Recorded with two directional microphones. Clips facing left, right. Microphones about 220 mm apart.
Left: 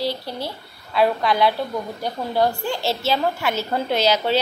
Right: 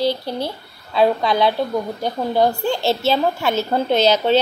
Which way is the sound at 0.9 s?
20° right (ahead or behind).